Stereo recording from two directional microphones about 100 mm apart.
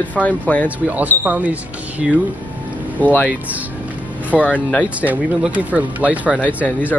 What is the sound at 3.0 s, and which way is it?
Speech, 15° left (ahead or behind).